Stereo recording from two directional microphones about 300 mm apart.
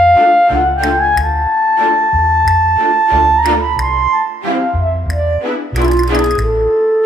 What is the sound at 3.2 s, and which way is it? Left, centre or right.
Music, centre.